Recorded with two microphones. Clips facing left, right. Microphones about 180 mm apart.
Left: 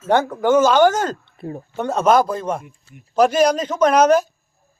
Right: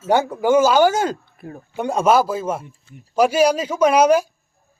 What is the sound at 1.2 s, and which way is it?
Speech, 25° left (ahead or behind).